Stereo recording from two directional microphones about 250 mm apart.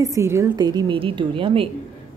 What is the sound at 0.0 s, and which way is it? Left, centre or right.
A woman's voice, centre.